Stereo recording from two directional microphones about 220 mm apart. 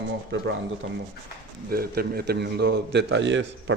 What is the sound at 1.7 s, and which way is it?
A man's voice, 45° right (ahead or behind).